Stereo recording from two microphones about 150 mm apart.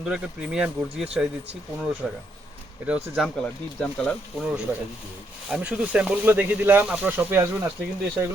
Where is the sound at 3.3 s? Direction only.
10° left (ahead or behind).